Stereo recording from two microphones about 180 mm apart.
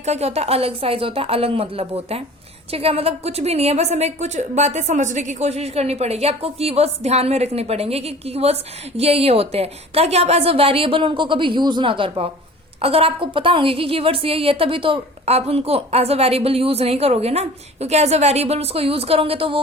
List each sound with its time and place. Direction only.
0.0 s a woman's voice: 35° right (ahead or behind)